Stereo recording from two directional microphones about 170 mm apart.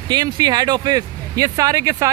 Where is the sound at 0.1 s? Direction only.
25° right (ahead or behind).